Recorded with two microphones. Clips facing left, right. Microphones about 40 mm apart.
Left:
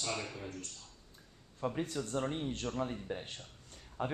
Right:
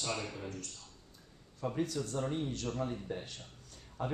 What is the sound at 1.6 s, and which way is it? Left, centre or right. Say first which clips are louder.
Speech: right 1 dB; left.